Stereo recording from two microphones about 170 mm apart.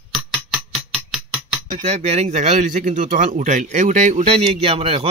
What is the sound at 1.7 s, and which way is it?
Speech, 40° right (ahead or behind).